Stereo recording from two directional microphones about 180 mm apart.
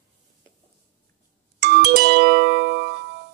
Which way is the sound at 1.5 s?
65° right (ahead or behind).